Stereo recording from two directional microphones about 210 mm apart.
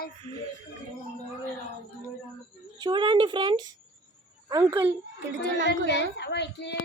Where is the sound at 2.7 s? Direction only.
20° right (ahead or behind).